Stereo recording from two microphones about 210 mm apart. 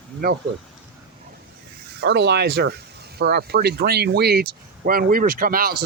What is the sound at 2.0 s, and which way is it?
Speech, 55° right (ahead or behind).